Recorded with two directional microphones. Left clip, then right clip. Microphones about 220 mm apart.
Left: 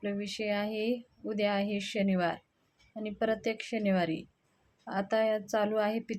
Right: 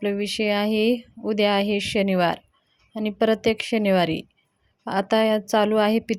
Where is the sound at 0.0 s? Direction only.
40° right (ahead or behind).